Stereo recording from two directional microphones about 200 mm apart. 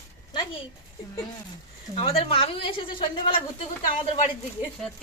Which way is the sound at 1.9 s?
30° left (ahead or behind).